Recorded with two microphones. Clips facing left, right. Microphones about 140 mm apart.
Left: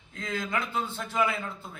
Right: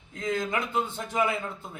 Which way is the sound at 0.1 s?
20° right (ahead or behind).